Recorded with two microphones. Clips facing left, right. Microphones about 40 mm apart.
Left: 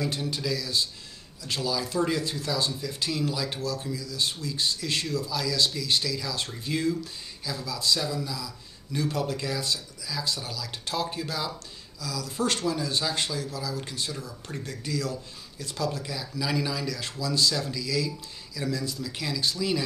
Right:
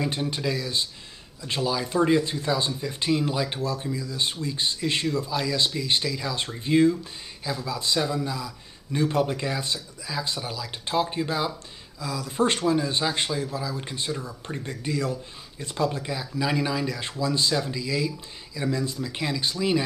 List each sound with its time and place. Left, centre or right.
0.0 s a man's voice: right